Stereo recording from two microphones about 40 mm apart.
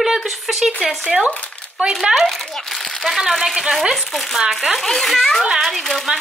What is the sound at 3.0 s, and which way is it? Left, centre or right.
A child's voice, centre.